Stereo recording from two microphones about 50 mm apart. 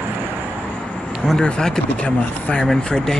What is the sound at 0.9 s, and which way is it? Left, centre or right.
Vehicle, centre.